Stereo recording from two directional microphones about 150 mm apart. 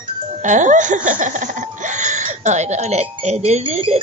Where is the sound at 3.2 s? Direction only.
45° right (ahead or behind).